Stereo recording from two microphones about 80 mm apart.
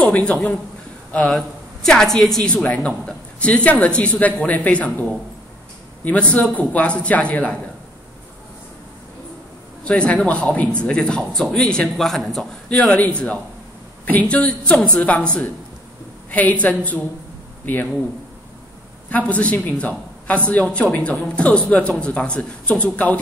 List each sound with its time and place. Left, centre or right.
0.0 s speech: centre
9.8 s a man's voice: centre
12.6 s a woman's voice: centre
19.0 s speech: centre